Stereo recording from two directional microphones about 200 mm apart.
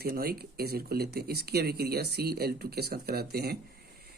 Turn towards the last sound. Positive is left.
turn(degrees=-50)  # may be behind; listen again after turning